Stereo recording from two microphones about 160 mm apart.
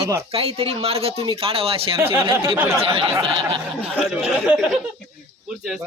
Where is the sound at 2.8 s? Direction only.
35° right (ahead or behind).